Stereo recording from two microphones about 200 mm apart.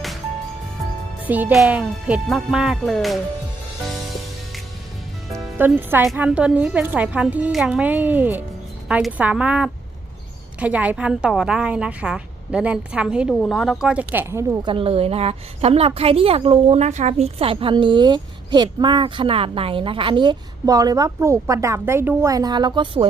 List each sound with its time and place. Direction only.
1.3 s a woman's voice: 10° right (ahead or behind)
5.4 s a woman's voice: 10° right (ahead or behind)
14.7 s a woman's voice: 30° right (ahead or behind)